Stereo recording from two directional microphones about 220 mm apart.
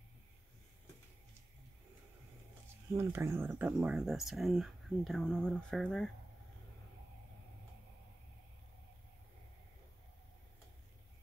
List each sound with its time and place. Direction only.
2.9 s speech: 10° right (ahead or behind); by 6.0 s 5° left (ahead or behind)